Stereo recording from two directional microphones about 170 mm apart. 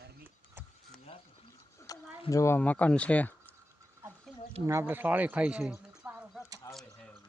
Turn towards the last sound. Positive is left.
turn(degrees=0)  # may be behind; listen again after turning